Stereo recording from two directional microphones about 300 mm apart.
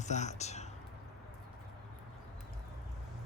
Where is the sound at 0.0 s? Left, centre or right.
Left.